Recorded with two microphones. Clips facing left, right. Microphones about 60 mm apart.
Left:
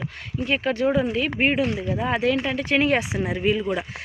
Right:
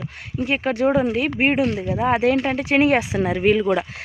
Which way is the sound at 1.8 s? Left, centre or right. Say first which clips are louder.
Right 4 dB; right.